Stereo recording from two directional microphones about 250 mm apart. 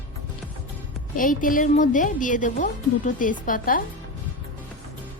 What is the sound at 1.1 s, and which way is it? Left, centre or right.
A woman's voice, left.